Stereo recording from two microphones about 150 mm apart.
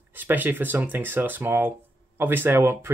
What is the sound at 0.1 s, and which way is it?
Speech, 10° right (ahead or behind).